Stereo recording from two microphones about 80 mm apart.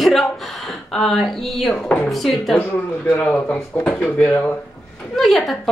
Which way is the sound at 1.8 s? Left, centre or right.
Centre.